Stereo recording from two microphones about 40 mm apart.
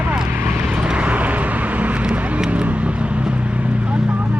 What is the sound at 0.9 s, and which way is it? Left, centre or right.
Vehicle, right.